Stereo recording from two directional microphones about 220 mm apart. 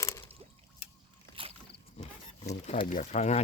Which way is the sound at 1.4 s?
25° right (ahead or behind).